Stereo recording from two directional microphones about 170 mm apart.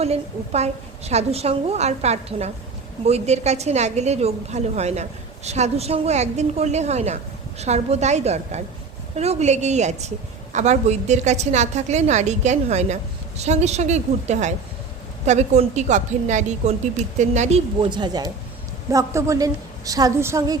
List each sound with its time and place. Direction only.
0.0 s a woman's voice: 40° right (ahead or behind)
17.7 s a woman's voice: 25° right (ahead or behind)